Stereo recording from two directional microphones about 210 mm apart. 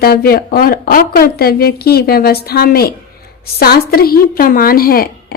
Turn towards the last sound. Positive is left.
turn(degrees=45)  # may be behind; listen again after turning